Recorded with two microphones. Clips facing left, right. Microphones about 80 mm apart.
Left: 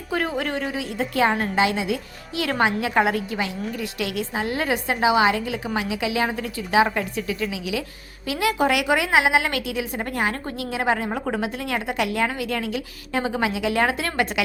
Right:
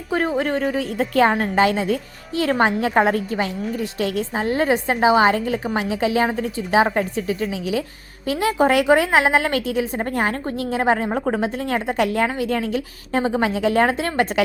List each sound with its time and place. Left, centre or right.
0.1 s a woman's voice: right